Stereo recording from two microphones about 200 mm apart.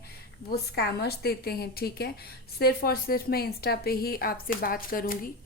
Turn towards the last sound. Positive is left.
turn(degrees=45)  # may be behind; listen again after turning